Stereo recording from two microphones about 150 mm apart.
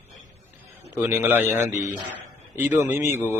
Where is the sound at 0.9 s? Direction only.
15° right (ahead or behind).